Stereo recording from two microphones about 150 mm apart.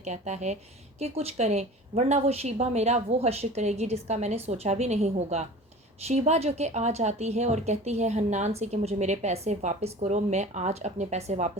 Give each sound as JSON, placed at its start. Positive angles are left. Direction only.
{"t": 0.0, "sound": "speech", "side_deg": -50}